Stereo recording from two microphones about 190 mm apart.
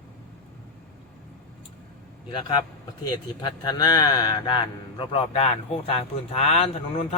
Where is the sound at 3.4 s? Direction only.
25° left (ahead or behind).